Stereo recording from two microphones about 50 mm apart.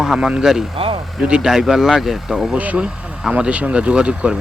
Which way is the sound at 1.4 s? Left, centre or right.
Centre.